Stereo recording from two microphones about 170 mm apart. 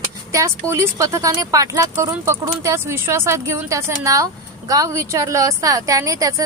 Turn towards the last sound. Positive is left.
turn(degrees=-20)  # may be behind; listen again after turning